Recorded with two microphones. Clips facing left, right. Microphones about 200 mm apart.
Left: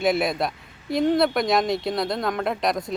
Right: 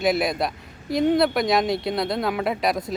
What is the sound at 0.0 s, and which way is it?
Speech, centre (ahead or behind).